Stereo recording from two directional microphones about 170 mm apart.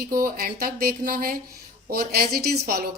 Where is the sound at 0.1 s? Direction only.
60° right (ahead or behind).